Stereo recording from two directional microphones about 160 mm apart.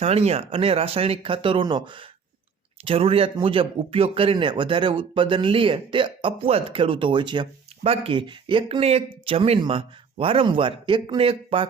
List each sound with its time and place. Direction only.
0.0 s speech: 40° right (ahead or behind)